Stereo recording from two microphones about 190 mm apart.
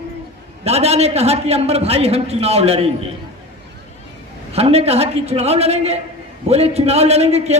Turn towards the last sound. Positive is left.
turn(degrees=-35)  # may be behind; listen again after turning